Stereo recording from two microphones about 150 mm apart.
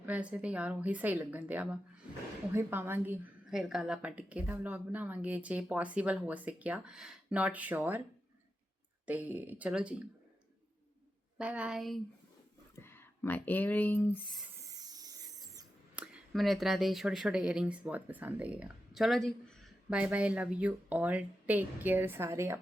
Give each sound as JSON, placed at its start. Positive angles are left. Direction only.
{"t": 0.0, "sound": "speech", "side_deg": -10}
{"t": 3.5, "sound": "speech", "side_deg": -5}
{"t": 9.0, "sound": "speech", "side_deg": -10}
{"t": 11.3, "sound": "a woman's voice", "side_deg": -10}
{"t": 12.7, "sound": "speech", "side_deg": 15}
{"t": 14.7, "sound": "a sound", "side_deg": -25}
{"t": 16.0, "sound": "speech", "side_deg": 0}
{"t": 20.0, "sound": "speech", "side_deg": -10}